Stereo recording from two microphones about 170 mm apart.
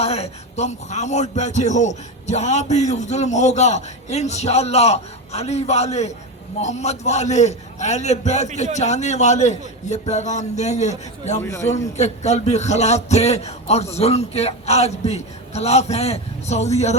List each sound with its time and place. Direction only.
0.0 s speech: 40° left (ahead or behind)
11.4 s a man's voice: 20° left (ahead or behind)
11.9 s a man's voice: 40° left (ahead or behind)